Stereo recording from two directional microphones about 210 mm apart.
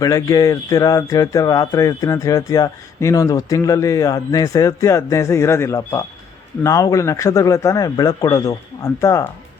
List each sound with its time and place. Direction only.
0.0 s speech: 15° left (ahead or behind)